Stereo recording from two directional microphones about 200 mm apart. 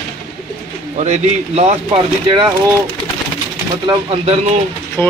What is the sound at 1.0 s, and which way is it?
A man's voice, 35° right (ahead or behind).